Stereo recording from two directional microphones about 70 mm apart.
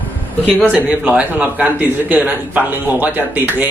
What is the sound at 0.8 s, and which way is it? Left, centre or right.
A man's voice, centre.